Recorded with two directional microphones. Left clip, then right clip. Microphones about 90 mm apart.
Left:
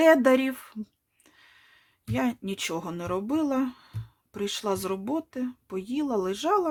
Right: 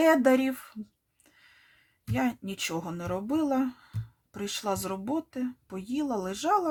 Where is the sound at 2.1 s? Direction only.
35° left (ahead or behind).